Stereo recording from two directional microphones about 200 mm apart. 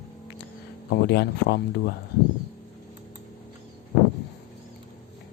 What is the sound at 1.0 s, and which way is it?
Speech, 55° left (ahead or behind).